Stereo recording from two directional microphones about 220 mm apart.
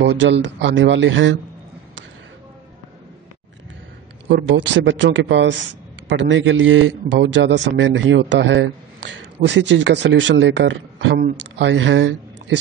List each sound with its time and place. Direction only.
0.0 s speech: 55° right (ahead or behind)
4.3 s speech: 55° right (ahead or behind)